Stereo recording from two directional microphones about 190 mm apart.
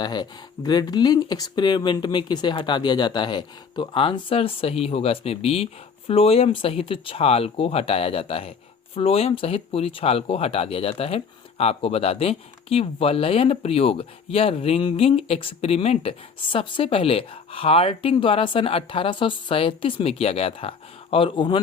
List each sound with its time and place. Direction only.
0.0 s speech: 20° left (ahead or behind)